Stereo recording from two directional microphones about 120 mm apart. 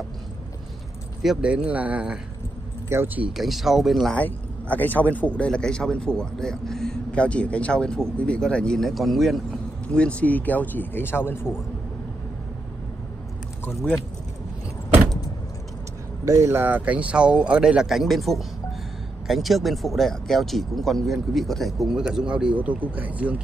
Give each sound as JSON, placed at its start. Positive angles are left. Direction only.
{"t": 1.2, "sound": "speech", "side_deg": -5}
{"t": 3.3, "sound": "speech", "side_deg": 0}
{"t": 16.3, "sound": "speech", "side_deg": -25}